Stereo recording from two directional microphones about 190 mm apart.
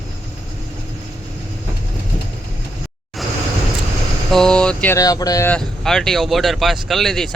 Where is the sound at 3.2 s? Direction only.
Centre (ahead or behind).